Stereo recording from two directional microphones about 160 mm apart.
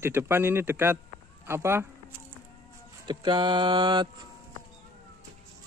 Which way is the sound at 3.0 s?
30° right (ahead or behind).